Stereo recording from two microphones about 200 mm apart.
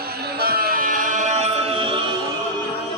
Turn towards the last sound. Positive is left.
turn(degrees=-25)  # may be behind; listen again after turning